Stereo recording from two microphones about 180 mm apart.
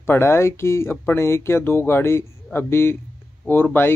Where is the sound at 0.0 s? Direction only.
15° left (ahead or behind).